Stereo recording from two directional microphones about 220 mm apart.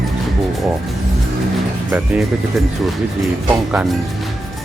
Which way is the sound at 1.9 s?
5° right (ahead or behind).